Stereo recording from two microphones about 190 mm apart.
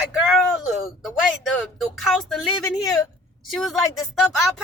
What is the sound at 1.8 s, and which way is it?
Speech, centre (ahead or behind).